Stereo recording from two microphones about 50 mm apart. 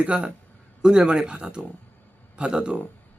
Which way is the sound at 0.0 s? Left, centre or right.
Right.